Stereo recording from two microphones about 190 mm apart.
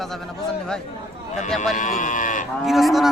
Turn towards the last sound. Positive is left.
turn(degrees=0)  # may be behind; listen again after turning